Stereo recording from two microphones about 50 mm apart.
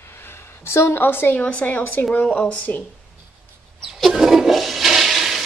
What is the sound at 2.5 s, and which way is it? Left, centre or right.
Speech, left.